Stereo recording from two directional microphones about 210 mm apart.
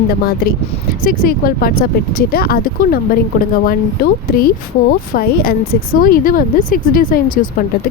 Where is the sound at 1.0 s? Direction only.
45° left (ahead or behind).